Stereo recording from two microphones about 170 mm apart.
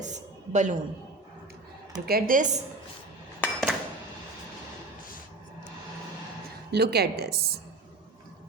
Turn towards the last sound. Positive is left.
turn(degrees=-70)  # may be behind; listen again after turning